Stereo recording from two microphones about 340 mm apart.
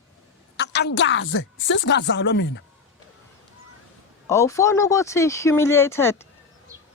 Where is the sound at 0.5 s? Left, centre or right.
Left.